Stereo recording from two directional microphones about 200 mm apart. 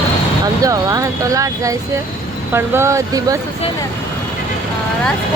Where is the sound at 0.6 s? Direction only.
15° right (ahead or behind).